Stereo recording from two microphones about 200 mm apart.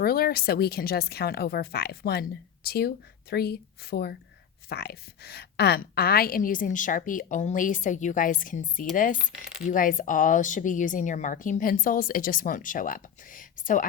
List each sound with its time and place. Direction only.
0.0 s a woman's voice: 50° left (ahead or behind)